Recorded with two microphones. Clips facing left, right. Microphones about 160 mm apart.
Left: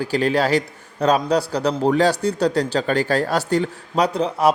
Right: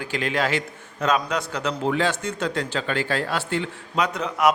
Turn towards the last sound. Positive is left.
turn(degrees=30)  # may be behind; listen again after turning